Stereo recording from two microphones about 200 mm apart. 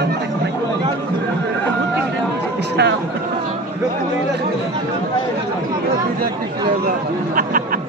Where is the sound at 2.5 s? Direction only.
60° right (ahead or behind).